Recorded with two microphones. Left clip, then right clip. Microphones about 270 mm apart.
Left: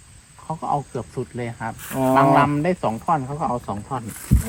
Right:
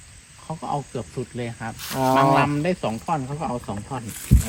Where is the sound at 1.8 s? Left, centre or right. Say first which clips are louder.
Even; centre.